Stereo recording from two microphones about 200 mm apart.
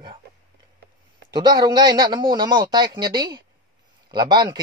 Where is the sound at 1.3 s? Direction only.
20° right (ahead or behind).